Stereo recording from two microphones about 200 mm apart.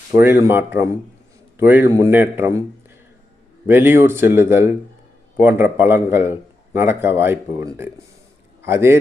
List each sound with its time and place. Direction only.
0.1 s a man's voice: 10° right (ahead or behind)
3.7 s a man's voice: 10° right (ahead or behind)